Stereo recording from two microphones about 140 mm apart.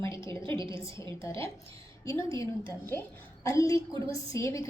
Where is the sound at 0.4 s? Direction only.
35° right (ahead or behind).